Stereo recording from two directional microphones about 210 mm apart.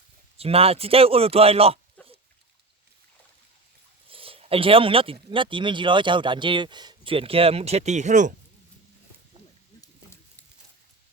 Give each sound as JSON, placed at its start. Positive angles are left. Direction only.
{"t": 0.3, "sound": "speech", "side_deg": -30}
{"t": 4.1, "sound": "speech", "side_deg": -25}